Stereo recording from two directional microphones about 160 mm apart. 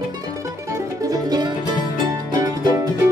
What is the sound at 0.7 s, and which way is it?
Music, 20° right (ahead or behind).